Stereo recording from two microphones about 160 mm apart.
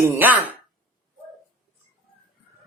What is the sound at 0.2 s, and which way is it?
Speech, 10° right (ahead or behind).